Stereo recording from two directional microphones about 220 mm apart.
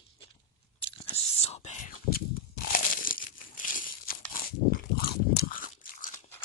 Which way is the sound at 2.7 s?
40° left (ahead or behind).